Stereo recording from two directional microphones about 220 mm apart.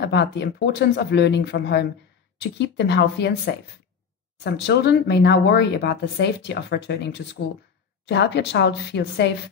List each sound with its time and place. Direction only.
0.0 s speech: 50° left (ahead or behind)